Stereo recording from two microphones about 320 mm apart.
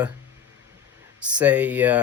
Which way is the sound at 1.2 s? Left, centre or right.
Centre.